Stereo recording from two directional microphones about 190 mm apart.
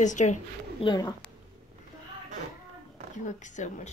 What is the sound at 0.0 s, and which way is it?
Speech, 40° left (ahead or behind).